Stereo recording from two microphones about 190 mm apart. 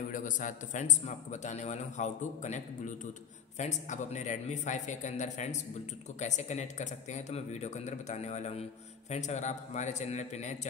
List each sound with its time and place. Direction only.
0.1 s a man's voice: 40° left (ahead or behind)